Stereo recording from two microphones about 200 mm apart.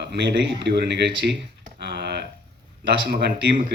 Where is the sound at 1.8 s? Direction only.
55° right (ahead or behind).